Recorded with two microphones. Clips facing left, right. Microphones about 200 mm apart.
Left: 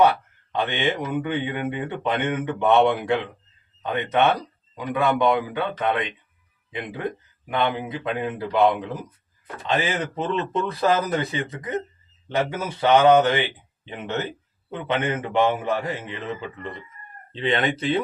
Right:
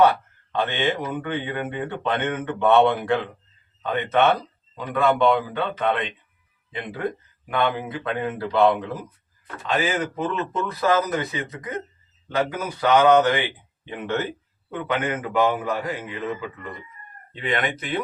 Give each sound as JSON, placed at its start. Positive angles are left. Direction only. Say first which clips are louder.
{"t": 0.5, "sound": "speech", "louder": "even", "side_deg": 15}
{"t": 7.5, "sound": "a man's voice", "louder": "even", "side_deg": 20}